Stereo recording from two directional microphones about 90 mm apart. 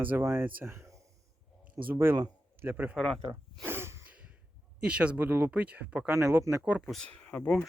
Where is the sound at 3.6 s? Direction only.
25° right (ahead or behind).